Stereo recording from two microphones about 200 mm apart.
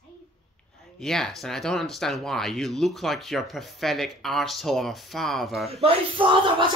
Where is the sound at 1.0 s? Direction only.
Centre (ahead or behind).